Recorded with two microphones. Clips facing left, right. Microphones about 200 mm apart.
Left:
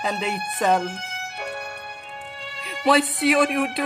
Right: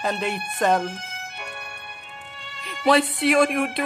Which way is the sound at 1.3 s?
40° left (ahead or behind).